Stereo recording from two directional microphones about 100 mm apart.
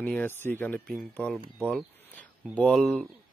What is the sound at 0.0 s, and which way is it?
A man's voice, 15° left (ahead or behind).